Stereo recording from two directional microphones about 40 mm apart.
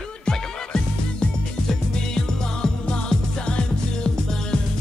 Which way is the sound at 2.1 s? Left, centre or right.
Centre.